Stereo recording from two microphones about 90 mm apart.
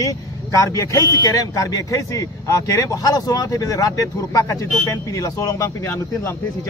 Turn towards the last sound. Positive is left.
turn(degrees=30)  # may be behind; listen again after turning